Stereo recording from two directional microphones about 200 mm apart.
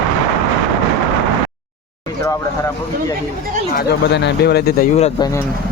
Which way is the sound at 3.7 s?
60° left (ahead or behind).